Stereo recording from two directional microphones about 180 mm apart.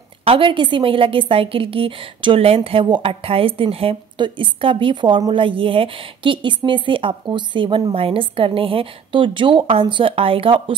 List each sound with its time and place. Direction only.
0.2 s a woman's voice: 30° right (ahead or behind)